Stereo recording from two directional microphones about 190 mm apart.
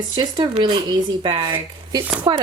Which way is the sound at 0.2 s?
25° right (ahead or behind).